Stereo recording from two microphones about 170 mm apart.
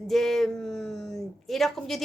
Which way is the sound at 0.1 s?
Centre (ahead or behind).